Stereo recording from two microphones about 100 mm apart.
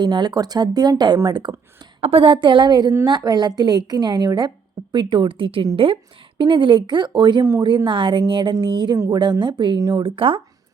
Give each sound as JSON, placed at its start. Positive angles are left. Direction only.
{"t": 0.0, "sound": "a woman's voice", "side_deg": -45}
{"t": 2.0, "sound": "a woman's voice", "side_deg": -70}
{"t": 10.0, "sound": "a woman's voice", "side_deg": -65}